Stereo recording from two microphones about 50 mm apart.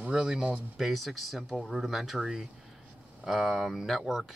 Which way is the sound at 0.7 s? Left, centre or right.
Centre.